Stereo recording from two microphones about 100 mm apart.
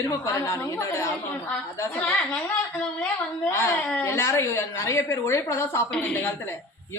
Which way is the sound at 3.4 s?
25° left (ahead or behind).